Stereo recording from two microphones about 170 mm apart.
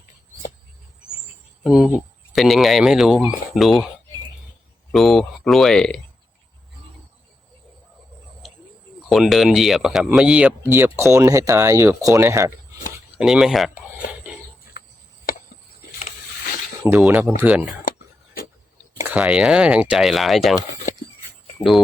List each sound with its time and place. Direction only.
1.6 s speech: 5° right (ahead or behind)
4.9 s speech: centre (ahead or behind)
9.0 s speech: centre (ahead or behind); by 12.5 s 15° right (ahead or behind)
13.1 s speech: 5° right (ahead or behind)
15.3 s a sound: 55° left (ahead or behind)
16.8 s speech: 10° right (ahead or behind)
17.9 s a sound: 55° left (ahead or behind)
19.1 s speech: 5° right (ahead or behind)